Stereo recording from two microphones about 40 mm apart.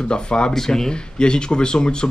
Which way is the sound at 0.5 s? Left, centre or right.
Centre.